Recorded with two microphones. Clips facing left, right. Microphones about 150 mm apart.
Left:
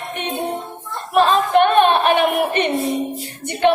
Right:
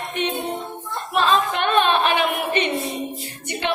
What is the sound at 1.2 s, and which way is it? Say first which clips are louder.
Speech: left 4 dB; 50° left (ahead or behind).